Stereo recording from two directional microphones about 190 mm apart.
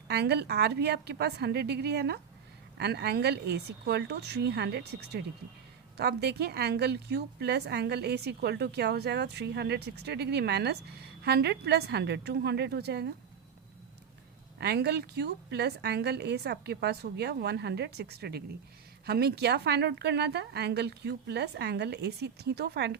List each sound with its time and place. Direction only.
0.1 s a woman's voice: 60° right (ahead or behind)
14.6 s a woman's voice: 60° right (ahead or behind)